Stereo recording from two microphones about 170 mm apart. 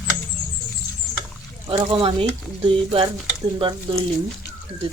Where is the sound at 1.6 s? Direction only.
30° right (ahead or behind).